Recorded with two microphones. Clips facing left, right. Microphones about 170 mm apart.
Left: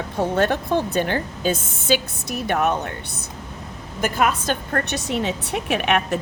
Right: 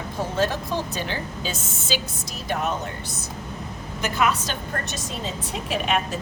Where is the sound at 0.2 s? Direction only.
60° left (ahead or behind).